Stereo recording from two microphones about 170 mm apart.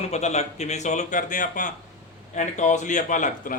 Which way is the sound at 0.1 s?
40° left (ahead or behind).